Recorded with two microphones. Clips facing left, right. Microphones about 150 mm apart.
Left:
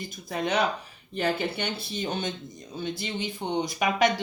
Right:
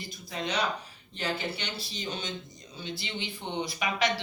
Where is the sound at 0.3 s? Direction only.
55° left (ahead or behind).